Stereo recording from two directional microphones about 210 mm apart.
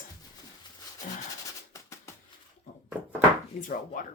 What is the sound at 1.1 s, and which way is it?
Speech, 40° left (ahead or behind).